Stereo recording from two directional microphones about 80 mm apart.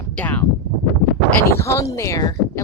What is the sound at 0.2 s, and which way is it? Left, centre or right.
Speech, left.